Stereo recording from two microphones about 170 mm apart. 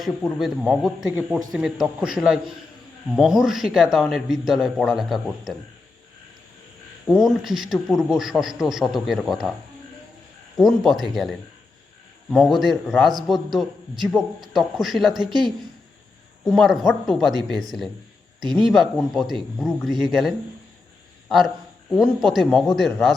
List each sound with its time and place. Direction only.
0.0 s speech: centre (ahead or behind)
7.1 s speech: centre (ahead or behind)
10.6 s speech: centre (ahead or behind)
16.4 s speech: centre (ahead or behind)
18.3 s speech: 25° right (ahead or behind)
18.6 s a man's voice: centre (ahead or behind)